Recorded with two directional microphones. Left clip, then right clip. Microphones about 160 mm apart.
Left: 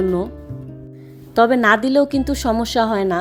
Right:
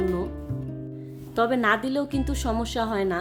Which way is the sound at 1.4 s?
40° left (ahead or behind).